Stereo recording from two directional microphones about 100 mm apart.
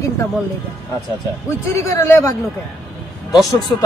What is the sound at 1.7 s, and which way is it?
Speech, 30° left (ahead or behind).